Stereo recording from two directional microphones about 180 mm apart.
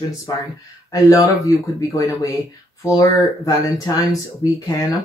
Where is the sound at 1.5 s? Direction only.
15° left (ahead or behind).